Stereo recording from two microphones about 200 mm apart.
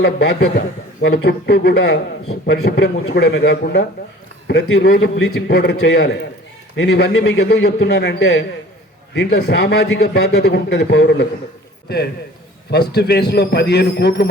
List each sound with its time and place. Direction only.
0.0 s a man's voice: 55° left (ahead or behind)
12.9 s a man's voice: 55° left (ahead or behind)